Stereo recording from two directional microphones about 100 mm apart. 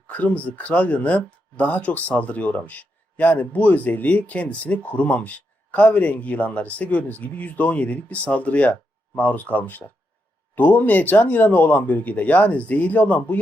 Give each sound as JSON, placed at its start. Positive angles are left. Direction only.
{"t": 0.1, "sound": "speech", "side_deg": 15}